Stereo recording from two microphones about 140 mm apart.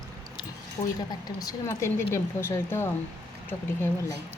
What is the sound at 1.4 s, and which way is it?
Speech, 25° left (ahead or behind).